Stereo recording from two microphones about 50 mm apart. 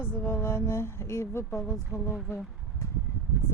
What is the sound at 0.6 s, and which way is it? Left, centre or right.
Speech, left.